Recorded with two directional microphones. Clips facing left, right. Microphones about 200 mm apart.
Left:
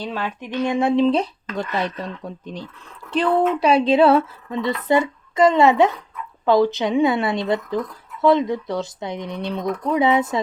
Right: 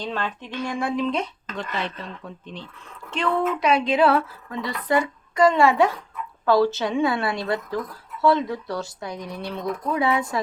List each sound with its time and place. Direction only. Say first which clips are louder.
0.0 s speech: left 2 dB; 10° left (ahead or behind)